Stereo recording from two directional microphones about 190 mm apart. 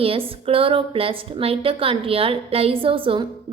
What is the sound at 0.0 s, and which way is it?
A woman's voice, 30° right (ahead or behind).